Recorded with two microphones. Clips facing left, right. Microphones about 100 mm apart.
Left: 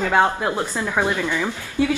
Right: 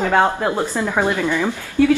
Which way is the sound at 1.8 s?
15° left (ahead or behind).